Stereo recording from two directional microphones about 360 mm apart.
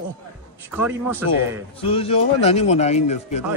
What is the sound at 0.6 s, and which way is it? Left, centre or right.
Speech, centre.